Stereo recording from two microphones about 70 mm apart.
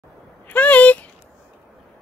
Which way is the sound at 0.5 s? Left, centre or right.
Left.